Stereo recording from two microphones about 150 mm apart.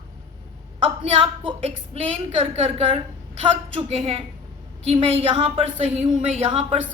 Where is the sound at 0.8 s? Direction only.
35° right (ahead or behind).